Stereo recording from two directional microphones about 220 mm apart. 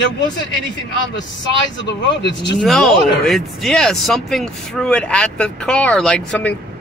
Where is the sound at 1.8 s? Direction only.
55° left (ahead or behind).